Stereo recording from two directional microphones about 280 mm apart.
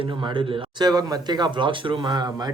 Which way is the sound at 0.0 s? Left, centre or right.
Centre.